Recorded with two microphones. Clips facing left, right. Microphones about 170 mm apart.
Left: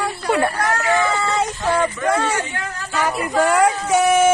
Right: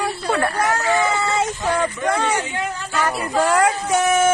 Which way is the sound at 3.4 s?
10° left (ahead or behind).